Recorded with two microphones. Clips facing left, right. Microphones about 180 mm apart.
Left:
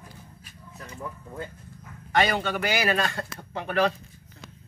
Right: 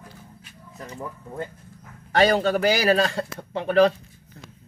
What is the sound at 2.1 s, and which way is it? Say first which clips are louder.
A man's voice: right 5 dB; 35° right (ahead or behind).